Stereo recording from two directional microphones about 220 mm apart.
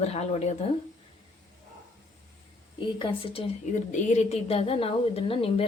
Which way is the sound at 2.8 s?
20° left (ahead or behind).